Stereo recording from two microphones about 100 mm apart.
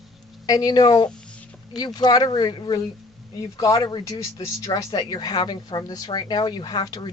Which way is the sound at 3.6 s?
35° left (ahead or behind).